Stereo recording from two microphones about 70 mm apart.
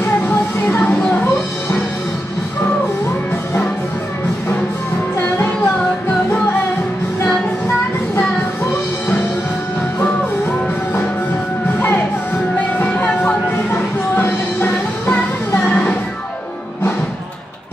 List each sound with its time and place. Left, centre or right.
0.0 s music: left
12.7 s music: left